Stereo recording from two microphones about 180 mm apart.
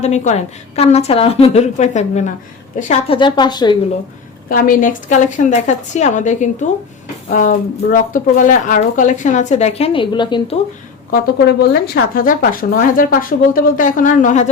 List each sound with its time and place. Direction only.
0.0 s a woman's voice: 40° left (ahead or behind)
3.1 s speech: 25° left (ahead or behind)
4.4 s speech: 50° left (ahead or behind); by 10.6 s 25° left (ahead or behind)
11.1 s speech: 65° left (ahead or behind); by 14.5 s 40° left (ahead or behind)